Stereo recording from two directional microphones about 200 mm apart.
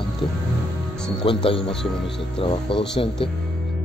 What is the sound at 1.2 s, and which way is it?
Speech, 25° left (ahead or behind).